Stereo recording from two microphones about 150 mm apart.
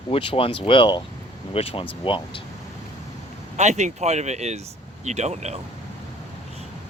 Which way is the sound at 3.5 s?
50° right (ahead or behind).